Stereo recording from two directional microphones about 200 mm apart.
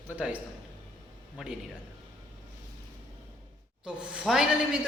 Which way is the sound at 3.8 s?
5° right (ahead or behind).